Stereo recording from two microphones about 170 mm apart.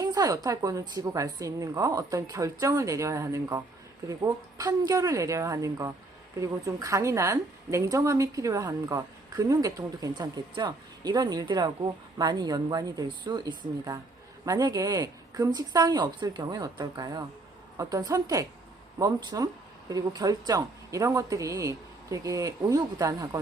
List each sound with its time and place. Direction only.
0.0 s a woman's voice: 20° right (ahead or behind)